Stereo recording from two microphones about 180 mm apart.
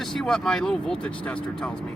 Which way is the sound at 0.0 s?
Centre (ahead or behind).